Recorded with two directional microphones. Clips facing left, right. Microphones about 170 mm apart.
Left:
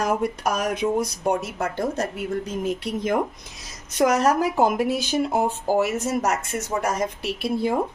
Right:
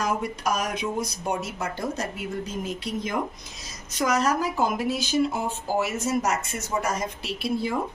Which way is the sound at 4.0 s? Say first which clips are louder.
Left 5 dB; 55° left (ahead or behind).